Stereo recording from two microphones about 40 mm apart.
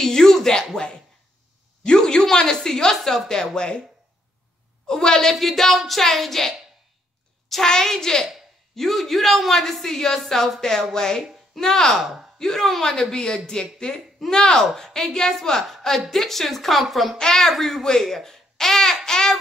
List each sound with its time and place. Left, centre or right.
0.0 s speech: centre
1.9 s speech: centre
4.8 s speech: centre
5.3 s speech: centre
7.6 s speech: centre
17.2 s speech: centre
19.0 s a sound: centre